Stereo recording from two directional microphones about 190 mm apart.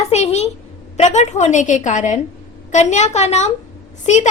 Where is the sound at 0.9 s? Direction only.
35° left (ahead or behind).